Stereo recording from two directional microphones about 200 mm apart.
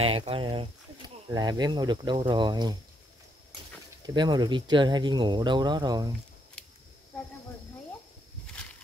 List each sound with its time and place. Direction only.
0.0 s speech: 30° right (ahead or behind)
4.0 s speech: 20° right (ahead or behind)